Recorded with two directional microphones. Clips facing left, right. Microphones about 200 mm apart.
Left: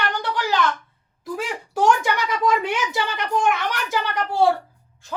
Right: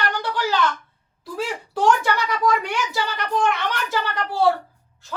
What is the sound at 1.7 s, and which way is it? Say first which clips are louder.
A woman's voice: even; 20° left (ahead or behind).